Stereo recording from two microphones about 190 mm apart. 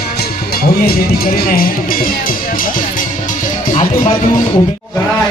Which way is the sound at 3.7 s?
25° left (ahead or behind).